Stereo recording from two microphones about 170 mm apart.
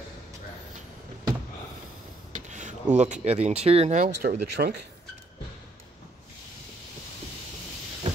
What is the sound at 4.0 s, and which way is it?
Speech, 65° right (ahead or behind).